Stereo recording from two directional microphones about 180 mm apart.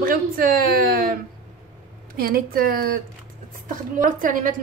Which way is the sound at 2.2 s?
55° right (ahead or behind).